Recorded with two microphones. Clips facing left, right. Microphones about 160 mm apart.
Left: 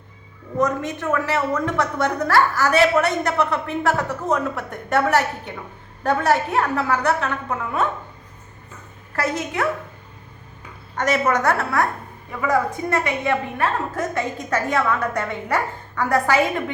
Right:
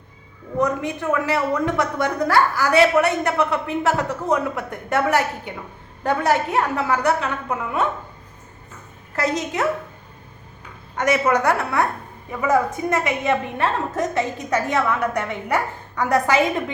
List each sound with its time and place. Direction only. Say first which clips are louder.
0.9 s a woman's voice: right 1 dB; 15° right (ahead or behind)
9.1 s a woman's voice: right 1 dB; 20° right (ahead or behind)
10.9 s a woman's voice: right 1 dB; 10° right (ahead or behind)